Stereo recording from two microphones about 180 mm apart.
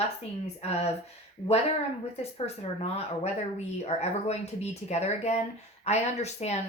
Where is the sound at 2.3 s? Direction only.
35° left (ahead or behind).